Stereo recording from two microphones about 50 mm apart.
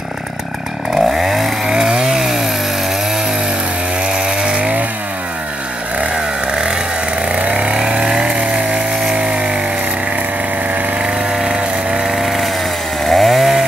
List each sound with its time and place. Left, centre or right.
0.9 s chainsaw: centre
4.1 s chainsaw: centre
7.3 s chainsaw: right
11.0 s a sound: centre
13.0 s chainsaw: centre